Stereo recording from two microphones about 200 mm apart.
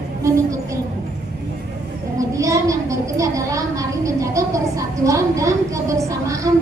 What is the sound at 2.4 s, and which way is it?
A woman's voice, 15° right (ahead or behind).